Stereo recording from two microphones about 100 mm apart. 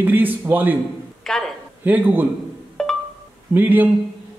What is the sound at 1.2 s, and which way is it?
Speech, 5° left (ahead or behind).